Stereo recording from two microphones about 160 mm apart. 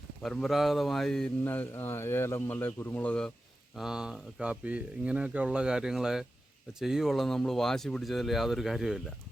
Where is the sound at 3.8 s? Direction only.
5° right (ahead or behind).